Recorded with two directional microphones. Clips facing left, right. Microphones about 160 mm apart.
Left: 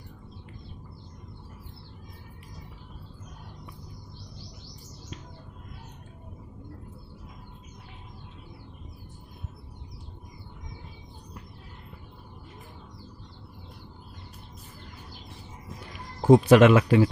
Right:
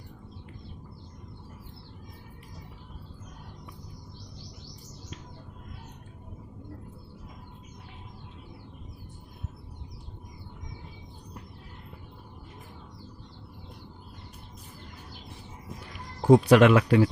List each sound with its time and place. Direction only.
16.2 s speech: 5° left (ahead or behind)